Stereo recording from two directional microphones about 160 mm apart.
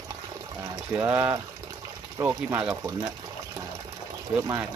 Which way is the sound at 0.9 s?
15° right (ahead or behind).